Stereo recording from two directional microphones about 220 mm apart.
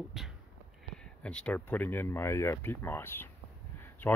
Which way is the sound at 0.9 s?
5° left (ahead or behind).